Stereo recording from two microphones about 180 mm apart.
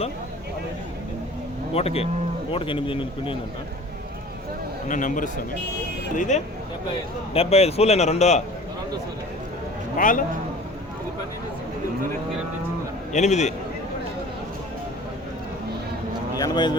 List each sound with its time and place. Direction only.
1.7 s speech: 35° left (ahead or behind)
4.9 s a man's voice: 45° left (ahead or behind)
10.0 s a man's voice: 50° left (ahead or behind)
13.1 s speech: 40° left (ahead or behind)
16.4 s speech: 25° left (ahead or behind)